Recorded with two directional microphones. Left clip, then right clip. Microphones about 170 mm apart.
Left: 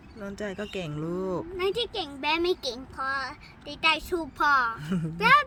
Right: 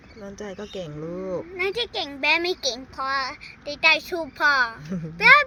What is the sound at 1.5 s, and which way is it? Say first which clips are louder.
A child's voice: right 3 dB; 25° left (ahead or behind).